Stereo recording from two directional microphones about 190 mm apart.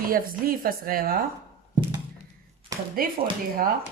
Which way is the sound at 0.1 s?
50° right (ahead or behind).